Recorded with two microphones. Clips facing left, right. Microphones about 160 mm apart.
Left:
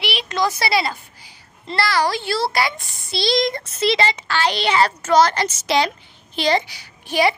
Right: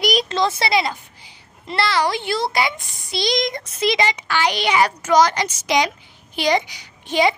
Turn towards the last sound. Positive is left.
turn(degrees=-20)  # may be behind; listen again after turning